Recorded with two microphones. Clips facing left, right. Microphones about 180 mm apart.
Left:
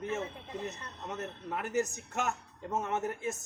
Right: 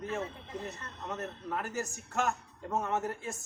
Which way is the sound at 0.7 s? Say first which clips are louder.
Right 1 dB; 15° left (ahead or behind).